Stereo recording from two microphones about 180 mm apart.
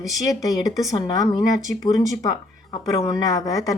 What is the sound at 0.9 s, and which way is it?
Speech, 20° left (ahead or behind).